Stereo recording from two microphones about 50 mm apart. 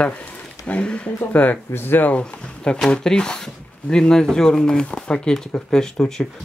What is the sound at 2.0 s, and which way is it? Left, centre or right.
Speech, left.